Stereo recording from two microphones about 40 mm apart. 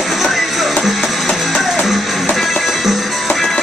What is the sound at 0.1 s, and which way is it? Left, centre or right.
Music, centre.